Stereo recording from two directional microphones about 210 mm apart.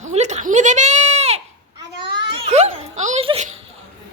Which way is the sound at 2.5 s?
30° right (ahead or behind).